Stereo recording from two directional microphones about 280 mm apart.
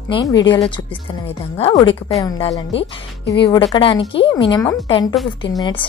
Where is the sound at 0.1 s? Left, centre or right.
Centre.